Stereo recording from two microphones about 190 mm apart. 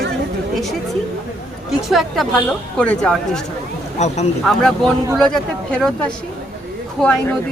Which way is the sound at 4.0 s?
35° left (ahead or behind).